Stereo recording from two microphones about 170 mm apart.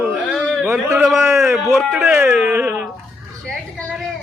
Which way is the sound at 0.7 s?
15° right (ahead or behind).